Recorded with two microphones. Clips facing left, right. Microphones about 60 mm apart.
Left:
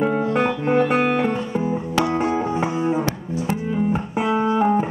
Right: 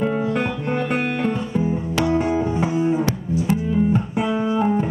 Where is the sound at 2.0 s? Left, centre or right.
Left.